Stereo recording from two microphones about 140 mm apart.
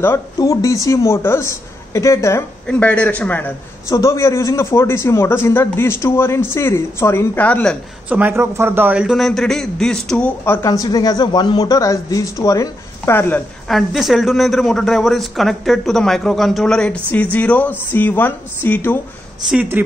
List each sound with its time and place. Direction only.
0.0 s speech: 20° left (ahead or behind)
2.6 s a man's voice: 10° left (ahead or behind)
8.1 s a man's voice: 10° right (ahead or behind); by 13.4 s 15° left (ahead or behind)
13.7 s a man's voice: centre (ahead or behind)
19.5 s speech: 10° right (ahead or behind)